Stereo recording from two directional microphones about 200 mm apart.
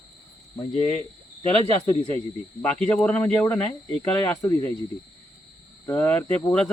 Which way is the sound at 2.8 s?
5° left (ahead or behind).